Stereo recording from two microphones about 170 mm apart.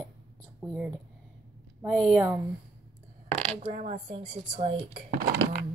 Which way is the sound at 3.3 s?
40° right (ahead or behind).